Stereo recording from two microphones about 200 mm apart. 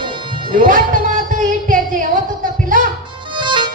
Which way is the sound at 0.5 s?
40° right (ahead or behind).